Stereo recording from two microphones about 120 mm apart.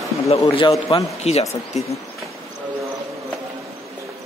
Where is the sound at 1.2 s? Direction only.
65° left (ahead or behind).